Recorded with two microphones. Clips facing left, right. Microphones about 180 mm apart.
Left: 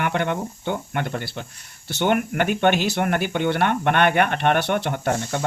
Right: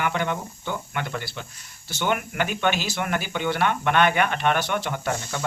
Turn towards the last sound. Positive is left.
turn(degrees=50)  # may be behind; listen again after turning